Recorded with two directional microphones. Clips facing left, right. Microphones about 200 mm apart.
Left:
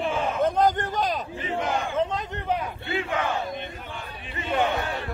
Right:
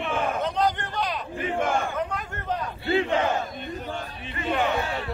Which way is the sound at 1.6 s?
50° right (ahead or behind).